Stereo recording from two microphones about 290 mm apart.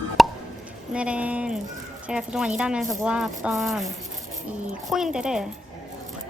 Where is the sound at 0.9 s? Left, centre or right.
Centre.